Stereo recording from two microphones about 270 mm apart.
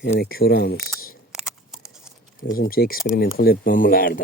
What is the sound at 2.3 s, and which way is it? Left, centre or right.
Speech, left.